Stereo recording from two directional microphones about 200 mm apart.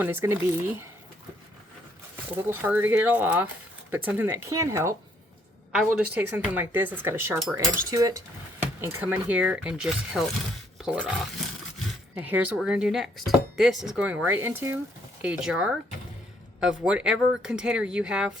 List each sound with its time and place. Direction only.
0.0 s speech: 10° right (ahead or behind)
2.3 s speech: 10° right (ahead or behind)